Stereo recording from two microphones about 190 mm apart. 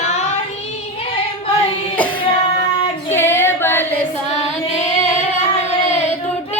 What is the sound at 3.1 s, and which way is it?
Female singing, 10° left (ahead or behind).